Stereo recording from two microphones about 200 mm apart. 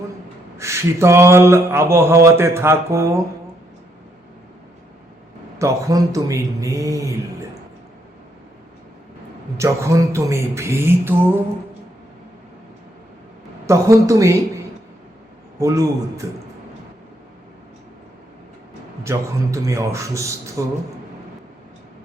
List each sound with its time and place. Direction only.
0.5 s speech: 15° right (ahead or behind)
5.5 s speech: 15° right (ahead or behind)
9.6 s speech: 15° right (ahead or behind)
13.7 s speech: 15° right (ahead or behind)
19.0 s speech: 15° right (ahead or behind)